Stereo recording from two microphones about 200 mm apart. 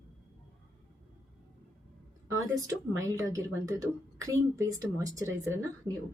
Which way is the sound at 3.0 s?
15° right (ahead or behind).